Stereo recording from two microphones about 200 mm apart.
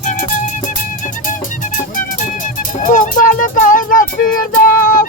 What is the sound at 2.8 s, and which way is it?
Music, 40° left (ahead or behind).